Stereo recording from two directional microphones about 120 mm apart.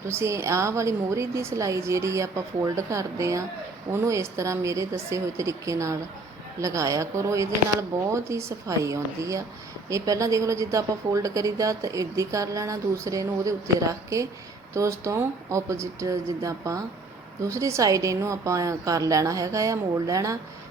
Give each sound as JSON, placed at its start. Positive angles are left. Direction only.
{"t": 0.1, "sound": "a woman's voice", "side_deg": -20}